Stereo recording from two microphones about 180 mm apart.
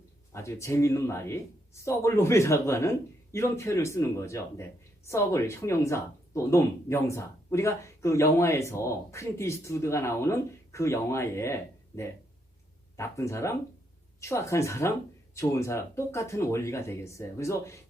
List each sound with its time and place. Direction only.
0.3 s speech: 15° left (ahead or behind)